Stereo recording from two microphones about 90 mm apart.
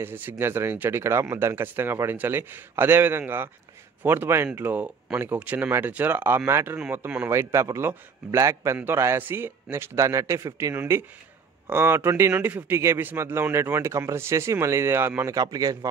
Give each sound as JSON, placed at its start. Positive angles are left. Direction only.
{"t": 0.0, "sound": "a man's voice", "side_deg": -20}
{"t": 15.2, "sound": "a man's voice", "side_deg": -40}